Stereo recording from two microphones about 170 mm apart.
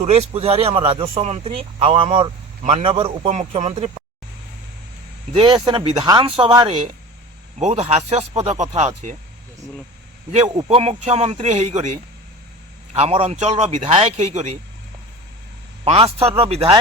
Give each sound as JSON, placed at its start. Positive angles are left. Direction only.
{"t": 0.0, "sound": "speech", "side_deg": -40}
{"t": 5.3, "sound": "speech", "side_deg": -30}
{"t": 7.6, "sound": "speech", "side_deg": -40}
{"t": 10.5, "sound": "speech", "side_deg": -25}
{"t": 10.8, "sound": "speech", "side_deg": -40}
{"t": 13.0, "sound": "speech", "side_deg": -35}
{"t": 15.8, "sound": "speech", "side_deg": -35}